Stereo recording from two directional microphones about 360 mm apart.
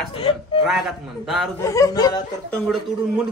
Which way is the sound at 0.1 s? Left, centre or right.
Centre.